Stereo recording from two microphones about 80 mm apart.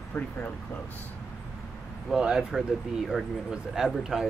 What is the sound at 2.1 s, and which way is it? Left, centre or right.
Speech, centre.